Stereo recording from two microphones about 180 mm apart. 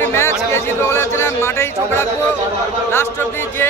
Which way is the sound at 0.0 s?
15° left (ahead or behind).